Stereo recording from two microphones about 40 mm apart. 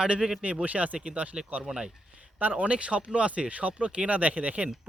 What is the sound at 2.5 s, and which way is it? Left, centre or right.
Speech, right.